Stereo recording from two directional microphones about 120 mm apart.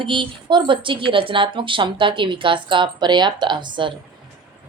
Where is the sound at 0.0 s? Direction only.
45° right (ahead or behind).